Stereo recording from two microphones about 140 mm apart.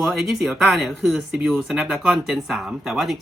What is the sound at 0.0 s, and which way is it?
Speech, centre (ahead or behind).